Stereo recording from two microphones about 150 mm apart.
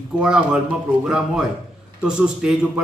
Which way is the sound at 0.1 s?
5° right (ahead or behind).